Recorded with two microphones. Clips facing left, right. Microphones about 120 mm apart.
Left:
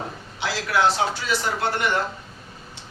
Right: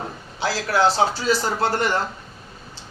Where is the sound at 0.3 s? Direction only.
35° right (ahead or behind).